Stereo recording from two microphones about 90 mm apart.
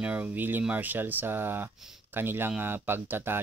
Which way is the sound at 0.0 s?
15° right (ahead or behind).